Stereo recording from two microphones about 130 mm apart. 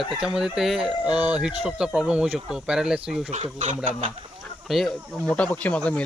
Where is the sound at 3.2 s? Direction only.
55° right (ahead or behind).